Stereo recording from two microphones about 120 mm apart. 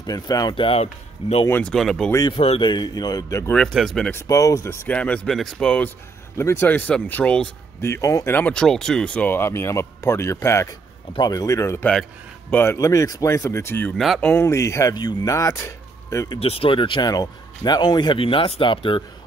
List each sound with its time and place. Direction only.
0.0 s speech: 30° left (ahead or behind)
1.5 s speech: 5° left (ahead or behind)
2.3 s speech: 55° left (ahead or behind)
2.6 s speech: 35° left (ahead or behind)
3.5 s speech: centre (ahead or behind)
4.1 s speech: 25° left (ahead or behind); by 5.9 s 5° left (ahead or behind)
6.3 s speech: 20° left (ahead or behind)
7.8 s speech: 25° left (ahead or behind)
8.4 s speech: 10° left (ahead or behind)
11.9 s a man's voice: 5° left (ahead or behind)
12.5 s speech: 25° left (ahead or behind)
13.9 s speech: centre (ahead or behind)
14.3 s speech: 20° left (ahead or behind)
16.3 s speech: 55° left (ahead or behind)